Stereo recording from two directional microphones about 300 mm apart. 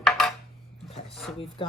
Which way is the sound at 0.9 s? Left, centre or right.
Centre.